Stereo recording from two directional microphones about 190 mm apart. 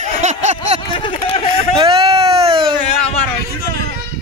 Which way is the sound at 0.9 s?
25° left (ahead or behind).